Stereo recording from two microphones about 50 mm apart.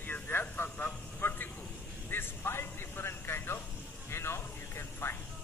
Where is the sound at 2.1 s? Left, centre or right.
Left.